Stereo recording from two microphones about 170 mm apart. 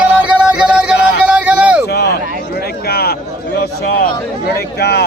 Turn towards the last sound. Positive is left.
turn(degrees=70)  # may be behind; listen again after turning